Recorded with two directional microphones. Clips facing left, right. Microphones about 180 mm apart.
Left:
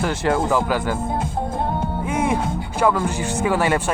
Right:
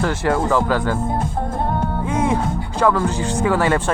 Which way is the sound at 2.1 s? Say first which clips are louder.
Right 1 dB; 10° left (ahead or behind).